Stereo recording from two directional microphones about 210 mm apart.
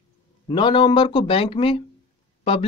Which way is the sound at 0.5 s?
25° left (ahead or behind).